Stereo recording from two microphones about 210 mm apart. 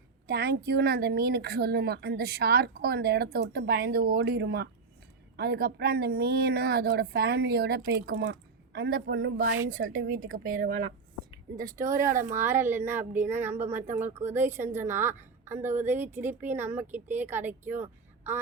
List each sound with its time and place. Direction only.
0.3 s a woman's voice: 50° right (ahead or behind)
10.7 s speech: 65° right (ahead or behind)
11.5 s a woman's voice: 15° right (ahead or behind)